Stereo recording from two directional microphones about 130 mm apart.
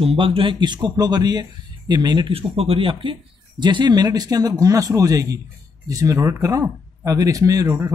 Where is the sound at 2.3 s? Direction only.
50° right (ahead or behind).